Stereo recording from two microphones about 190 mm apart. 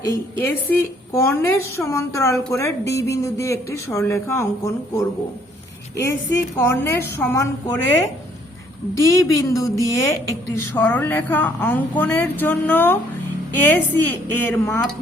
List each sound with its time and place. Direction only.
0.0 s a woman's voice: 15° left (ahead or behind)
9.0 s a woman's voice: 15° left (ahead or behind)